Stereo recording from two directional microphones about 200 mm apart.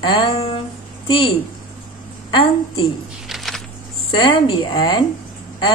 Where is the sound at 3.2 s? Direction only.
Centre (ahead or behind).